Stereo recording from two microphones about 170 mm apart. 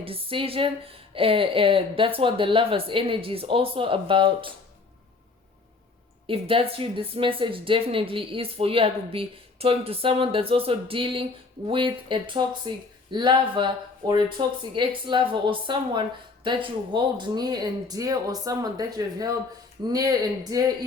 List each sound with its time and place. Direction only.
0.0 s speech: 30° right (ahead or behind)
6.2 s speech: 30° right (ahead or behind)